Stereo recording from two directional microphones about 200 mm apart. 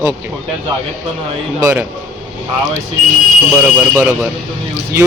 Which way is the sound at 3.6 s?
10° right (ahead or behind).